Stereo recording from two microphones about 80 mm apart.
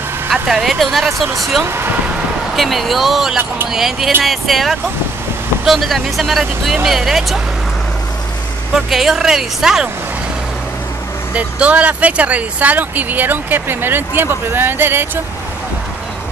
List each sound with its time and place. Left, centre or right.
0.3 s speech: centre
1.6 s speech: right
2.5 s speech: centre
8.7 s speech: centre
11.3 s speech: centre